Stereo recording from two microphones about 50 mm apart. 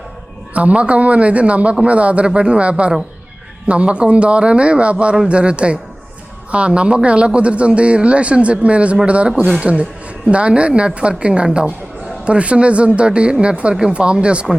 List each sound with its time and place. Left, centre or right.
0.5 s a man's voice: right